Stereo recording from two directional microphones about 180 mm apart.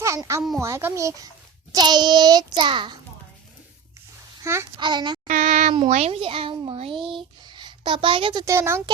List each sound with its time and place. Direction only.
0.0 s a child's voice: 15° right (ahead or behind)
4.4 s a child's voice: 15° right (ahead or behind)
5.3 s a sound: 45° right (ahead or behind)
5.9 s a child's voice: 35° right (ahead or behind)
6.9 s speech: centre (ahead or behind)
7.4 s a woman's voice: 25° right (ahead or behind)
8.5 s a child's voice: 15° right (ahead or behind)